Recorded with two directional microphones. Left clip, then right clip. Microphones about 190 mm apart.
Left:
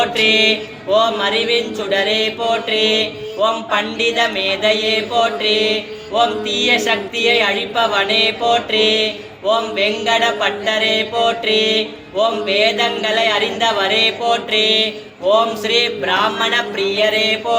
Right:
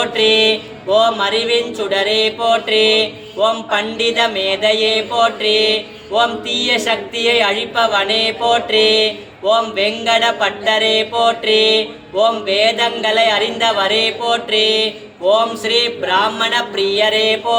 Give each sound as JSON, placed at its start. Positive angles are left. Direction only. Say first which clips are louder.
{"t": 0.0, "sound": "mantra", "louder": "right 1 dB", "side_deg": -35}